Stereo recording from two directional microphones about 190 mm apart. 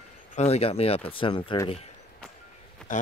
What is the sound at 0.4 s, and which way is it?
Speech, 30° left (ahead or behind).